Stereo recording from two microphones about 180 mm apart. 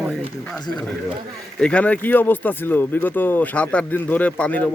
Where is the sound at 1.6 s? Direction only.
5° left (ahead or behind).